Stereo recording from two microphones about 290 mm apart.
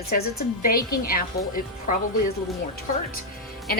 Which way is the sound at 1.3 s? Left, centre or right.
Left.